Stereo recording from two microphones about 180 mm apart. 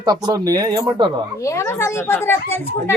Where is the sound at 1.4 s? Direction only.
15° left (ahead or behind).